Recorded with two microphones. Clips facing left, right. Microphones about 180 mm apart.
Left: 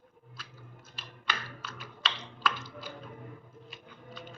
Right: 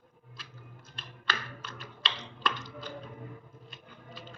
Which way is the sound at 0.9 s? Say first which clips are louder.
Right 1 dB; 5° left (ahead or behind).